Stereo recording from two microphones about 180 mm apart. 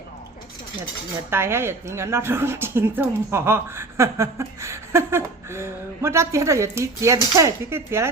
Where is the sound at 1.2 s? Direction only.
15° right (ahead or behind).